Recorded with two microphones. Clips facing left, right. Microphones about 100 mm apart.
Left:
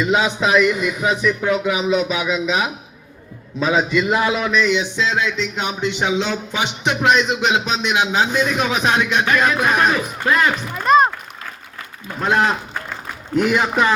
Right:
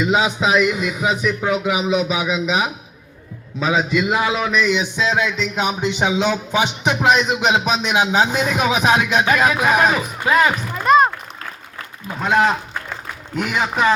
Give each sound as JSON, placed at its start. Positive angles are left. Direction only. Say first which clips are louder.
{"t": 0.0, "sound": "a man's voice", "louder": "even", "side_deg": -5}
{"t": 10.8, "sound": "music", "louder": "even", "side_deg": -5}
{"t": 12.2, "sound": "a man's voice", "louder": "right 1 dB", "side_deg": -5}